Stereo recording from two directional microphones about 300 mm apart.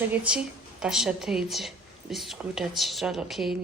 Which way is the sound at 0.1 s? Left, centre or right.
Centre.